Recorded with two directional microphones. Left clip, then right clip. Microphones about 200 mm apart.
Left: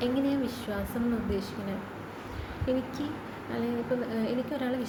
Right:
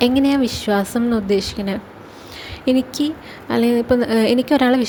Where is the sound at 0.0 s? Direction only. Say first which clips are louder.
Right 13 dB; 50° right (ahead or behind).